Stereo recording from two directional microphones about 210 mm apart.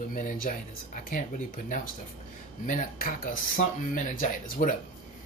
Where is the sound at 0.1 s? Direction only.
40° left (ahead or behind).